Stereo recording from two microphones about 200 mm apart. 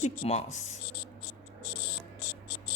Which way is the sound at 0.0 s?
30° left (ahead or behind).